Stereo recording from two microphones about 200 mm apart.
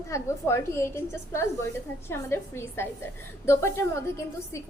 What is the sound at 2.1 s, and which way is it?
A woman's voice, 10° left (ahead or behind).